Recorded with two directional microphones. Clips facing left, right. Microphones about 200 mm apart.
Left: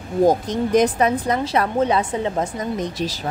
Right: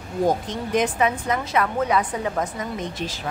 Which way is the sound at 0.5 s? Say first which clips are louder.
Left 6 dB; 40° left (ahead or behind).